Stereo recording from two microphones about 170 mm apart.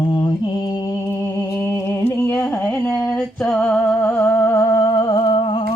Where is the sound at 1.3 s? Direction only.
15° left (ahead or behind).